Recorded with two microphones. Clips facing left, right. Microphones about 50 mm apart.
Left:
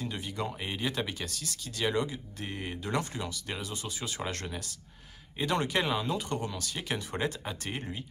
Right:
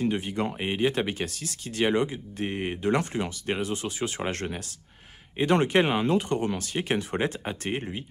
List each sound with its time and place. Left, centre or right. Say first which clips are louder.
0.0 s speech: right 8 dB; right